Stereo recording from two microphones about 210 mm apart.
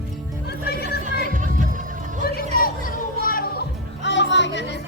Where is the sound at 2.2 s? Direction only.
45° left (ahead or behind).